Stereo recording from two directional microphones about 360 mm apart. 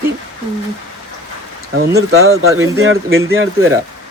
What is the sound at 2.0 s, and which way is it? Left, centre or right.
Speech, right.